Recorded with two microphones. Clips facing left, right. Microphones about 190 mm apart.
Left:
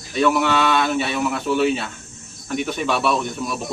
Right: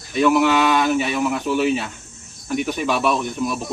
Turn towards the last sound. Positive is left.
turn(degrees=-10)  # may be behind; listen again after turning